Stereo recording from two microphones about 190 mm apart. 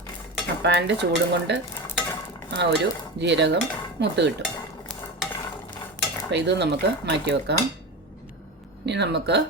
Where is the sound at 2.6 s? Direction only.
65° right (ahead or behind).